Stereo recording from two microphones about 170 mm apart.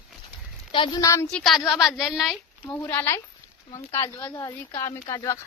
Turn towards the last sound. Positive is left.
turn(degrees=15)  # may be behind; listen again after turning